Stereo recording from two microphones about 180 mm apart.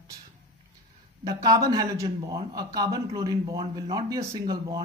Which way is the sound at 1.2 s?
20° right (ahead or behind).